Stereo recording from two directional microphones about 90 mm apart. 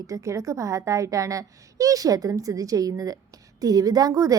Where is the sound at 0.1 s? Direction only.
35° right (ahead or behind).